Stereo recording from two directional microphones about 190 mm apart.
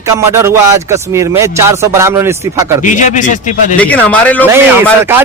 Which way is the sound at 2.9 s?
40° left (ahead or behind).